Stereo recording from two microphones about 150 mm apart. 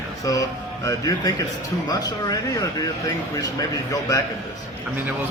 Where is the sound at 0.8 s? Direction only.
25° left (ahead or behind).